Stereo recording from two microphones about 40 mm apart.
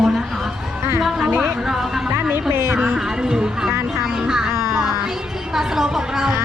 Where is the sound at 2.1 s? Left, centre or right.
Right.